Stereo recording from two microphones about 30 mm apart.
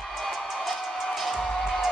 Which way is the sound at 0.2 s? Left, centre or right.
Centre.